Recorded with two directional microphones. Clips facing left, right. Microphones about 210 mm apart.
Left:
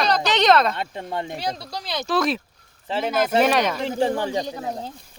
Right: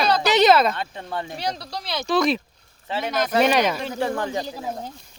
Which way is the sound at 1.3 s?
Centre (ahead or behind).